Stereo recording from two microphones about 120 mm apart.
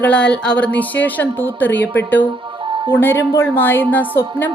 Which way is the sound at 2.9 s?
20° left (ahead or behind).